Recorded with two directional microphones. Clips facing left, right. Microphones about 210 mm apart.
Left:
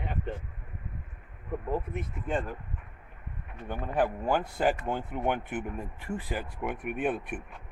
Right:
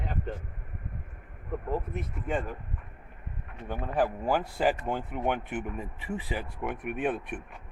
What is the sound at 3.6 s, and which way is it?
Speech, centre (ahead or behind).